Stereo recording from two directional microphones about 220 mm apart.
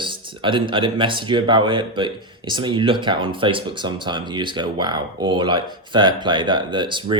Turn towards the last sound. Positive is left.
turn(degrees=-20)  # may be behind; listen again after turning